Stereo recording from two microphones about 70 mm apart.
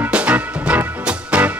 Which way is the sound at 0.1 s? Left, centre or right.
Centre.